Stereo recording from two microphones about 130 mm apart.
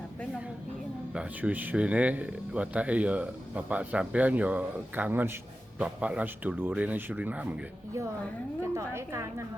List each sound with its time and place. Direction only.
1.1 s speech: 10° right (ahead or behind)
8.7 s a woman's voice: 20° right (ahead or behind)